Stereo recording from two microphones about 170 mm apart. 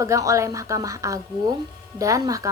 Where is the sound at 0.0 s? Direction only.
20° right (ahead or behind).